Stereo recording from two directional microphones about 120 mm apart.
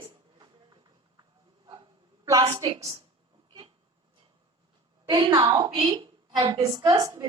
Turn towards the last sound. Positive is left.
turn(degrees=-30)  # may be behind; listen again after turning